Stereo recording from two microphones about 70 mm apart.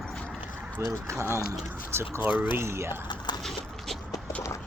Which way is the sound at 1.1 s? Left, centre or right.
Right.